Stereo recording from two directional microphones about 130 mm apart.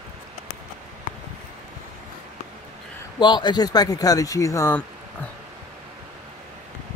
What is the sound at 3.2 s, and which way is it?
Speech, 35° left (ahead or behind).